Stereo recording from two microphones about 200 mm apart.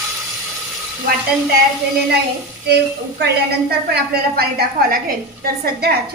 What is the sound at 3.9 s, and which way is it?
A woman's voice, 50° right (ahead or behind).